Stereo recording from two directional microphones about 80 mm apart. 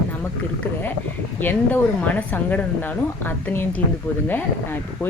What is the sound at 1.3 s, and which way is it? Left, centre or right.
A woman's voice, left.